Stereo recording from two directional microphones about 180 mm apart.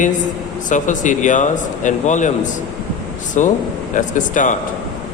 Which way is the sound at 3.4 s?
40° left (ahead or behind).